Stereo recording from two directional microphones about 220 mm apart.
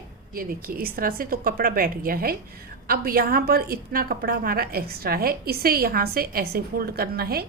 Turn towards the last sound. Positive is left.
turn(degrees=-45)  # may be behind; listen again after turning